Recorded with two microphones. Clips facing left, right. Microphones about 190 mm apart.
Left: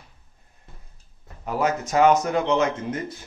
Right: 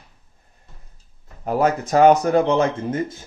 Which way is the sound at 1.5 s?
40° right (ahead or behind).